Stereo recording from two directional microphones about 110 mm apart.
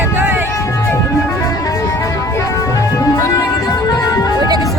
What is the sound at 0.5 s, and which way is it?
Music, 25° left (ahead or behind).